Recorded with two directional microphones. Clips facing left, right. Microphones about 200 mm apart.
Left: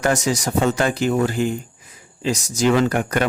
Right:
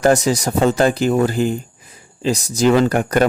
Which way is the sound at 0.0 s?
35° right (ahead or behind).